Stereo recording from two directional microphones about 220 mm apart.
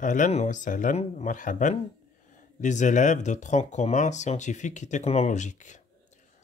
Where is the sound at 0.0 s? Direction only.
35° left (ahead or behind).